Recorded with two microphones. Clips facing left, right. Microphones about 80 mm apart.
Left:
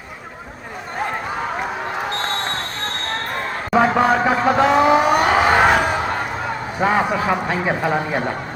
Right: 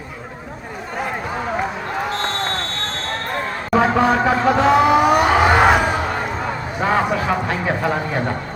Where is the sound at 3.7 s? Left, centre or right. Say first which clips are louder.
Even; centre.